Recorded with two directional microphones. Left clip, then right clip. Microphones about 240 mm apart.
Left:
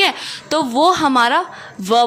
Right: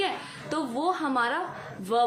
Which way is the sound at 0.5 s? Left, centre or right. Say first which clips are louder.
Left 14 dB; left.